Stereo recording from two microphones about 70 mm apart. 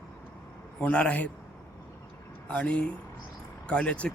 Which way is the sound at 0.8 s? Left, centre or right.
Centre.